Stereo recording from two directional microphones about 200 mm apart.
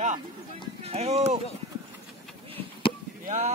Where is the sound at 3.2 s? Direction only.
35° right (ahead or behind).